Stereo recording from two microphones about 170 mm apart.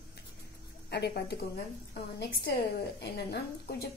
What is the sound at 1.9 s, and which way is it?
A woman's voice, 65° left (ahead or behind).